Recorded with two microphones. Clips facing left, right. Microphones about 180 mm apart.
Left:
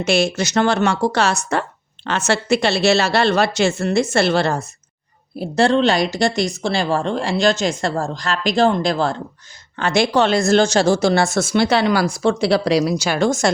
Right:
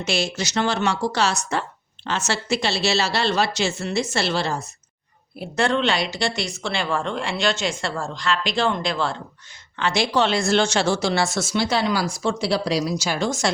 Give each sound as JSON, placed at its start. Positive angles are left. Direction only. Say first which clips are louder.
{"t": 0.0, "sound": "a woman's voice", "louder": "left 7 dB", "side_deg": 55}
{"t": 5.4, "sound": "speech", "louder": "left 6 dB", "side_deg": 35}